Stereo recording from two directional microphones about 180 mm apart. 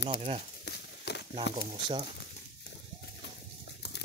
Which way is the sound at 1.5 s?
25° right (ahead or behind).